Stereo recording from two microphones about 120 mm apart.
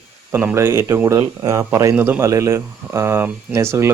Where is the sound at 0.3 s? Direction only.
15° right (ahead or behind).